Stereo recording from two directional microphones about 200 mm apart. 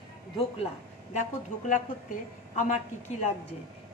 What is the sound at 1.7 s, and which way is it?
A woman's voice, 40° left (ahead or behind).